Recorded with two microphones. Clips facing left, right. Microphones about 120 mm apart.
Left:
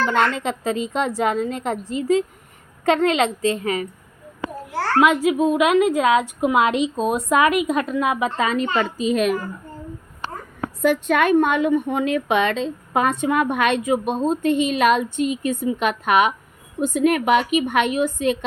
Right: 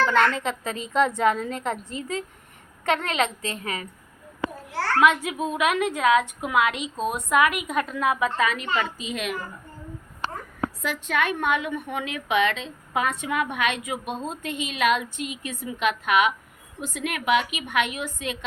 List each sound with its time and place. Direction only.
0.0 s a woman's voice: 20° left (ahead or behind)
4.9 s a woman's voice: 20° left (ahead or behind)
8.4 s a woman's voice: 35° left (ahead or behind)
10.8 s a woman's voice: 50° left (ahead or behind)
11.3 s a woman's voice: 40° left (ahead or behind)